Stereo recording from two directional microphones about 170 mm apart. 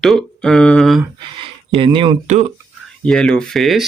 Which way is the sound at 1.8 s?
30° right (ahead or behind).